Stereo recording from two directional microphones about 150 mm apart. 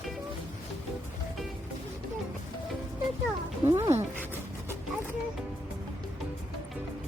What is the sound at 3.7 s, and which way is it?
Cat, 20° right (ahead or behind).